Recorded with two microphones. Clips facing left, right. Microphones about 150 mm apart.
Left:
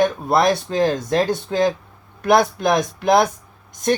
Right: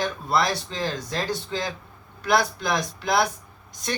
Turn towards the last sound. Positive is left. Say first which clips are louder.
# left 11 dB
turn(degrees=50)  # may be behind; listen again after turning